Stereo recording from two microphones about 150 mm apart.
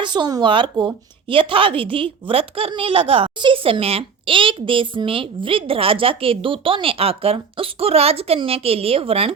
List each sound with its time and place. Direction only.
0.0 s a woman's voice: 30° right (ahead or behind)